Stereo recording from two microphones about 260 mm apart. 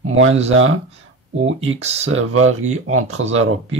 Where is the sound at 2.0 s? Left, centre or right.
Right.